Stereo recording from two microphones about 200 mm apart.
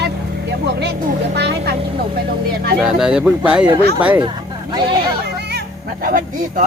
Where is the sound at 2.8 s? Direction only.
5° right (ahead or behind).